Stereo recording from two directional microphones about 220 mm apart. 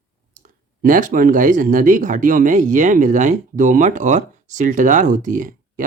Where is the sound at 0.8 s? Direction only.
35° right (ahead or behind).